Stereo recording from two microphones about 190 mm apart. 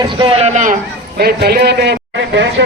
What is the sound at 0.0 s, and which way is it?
Speech, 25° right (ahead or behind).